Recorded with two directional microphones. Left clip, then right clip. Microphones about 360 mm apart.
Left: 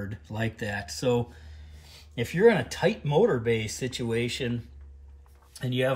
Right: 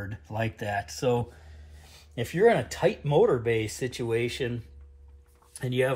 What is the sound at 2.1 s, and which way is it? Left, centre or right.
Speech, centre.